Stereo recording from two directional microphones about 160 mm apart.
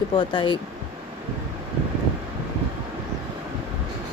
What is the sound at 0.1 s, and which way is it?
Speech, 30° left (ahead or behind).